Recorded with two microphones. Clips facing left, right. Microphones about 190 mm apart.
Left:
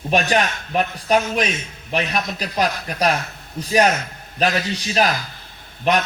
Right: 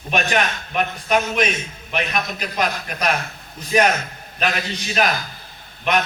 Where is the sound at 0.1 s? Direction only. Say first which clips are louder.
Left 2 dB; 35° left (ahead or behind).